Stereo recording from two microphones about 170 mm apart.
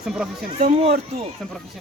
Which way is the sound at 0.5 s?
40° right (ahead or behind).